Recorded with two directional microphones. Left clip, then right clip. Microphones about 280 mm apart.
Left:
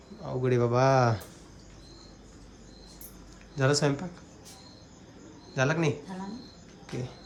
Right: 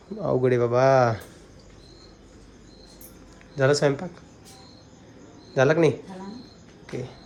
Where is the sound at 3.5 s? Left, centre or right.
Centre.